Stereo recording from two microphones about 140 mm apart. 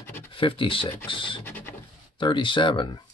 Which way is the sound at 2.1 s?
35° left (ahead or behind).